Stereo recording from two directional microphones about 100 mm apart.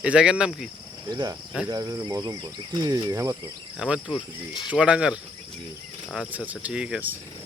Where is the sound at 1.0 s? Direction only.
40° right (ahead or behind).